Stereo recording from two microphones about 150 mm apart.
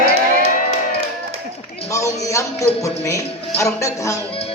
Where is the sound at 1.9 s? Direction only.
20° left (ahead or behind).